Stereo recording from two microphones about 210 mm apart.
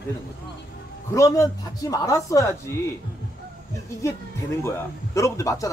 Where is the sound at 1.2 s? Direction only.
15° left (ahead or behind).